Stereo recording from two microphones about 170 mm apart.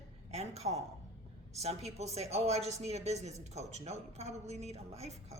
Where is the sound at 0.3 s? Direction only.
40° right (ahead or behind).